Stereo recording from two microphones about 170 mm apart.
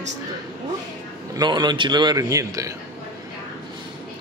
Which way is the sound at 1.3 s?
25° right (ahead or behind).